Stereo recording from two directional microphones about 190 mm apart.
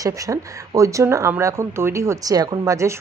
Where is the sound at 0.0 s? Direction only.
15° right (ahead or behind).